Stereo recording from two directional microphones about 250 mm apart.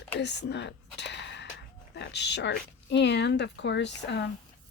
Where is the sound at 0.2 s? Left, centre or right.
Left.